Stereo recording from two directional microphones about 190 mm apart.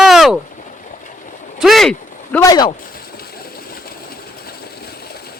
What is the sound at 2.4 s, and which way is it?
Speech, 20° left (ahead or behind).